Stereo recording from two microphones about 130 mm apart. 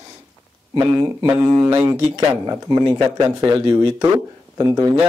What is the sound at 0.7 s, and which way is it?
Speech, 35° right (ahead or behind).